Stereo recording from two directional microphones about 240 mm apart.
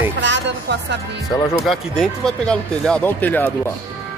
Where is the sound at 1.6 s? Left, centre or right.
Centre.